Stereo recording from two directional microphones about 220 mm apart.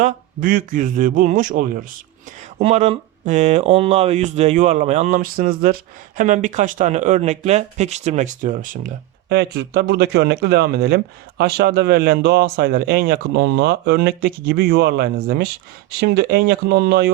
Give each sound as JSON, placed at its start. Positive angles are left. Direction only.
{"t": 0.0, "sound": "speech", "side_deg": -40}
{"t": 9.3, "sound": "speech", "side_deg": -50}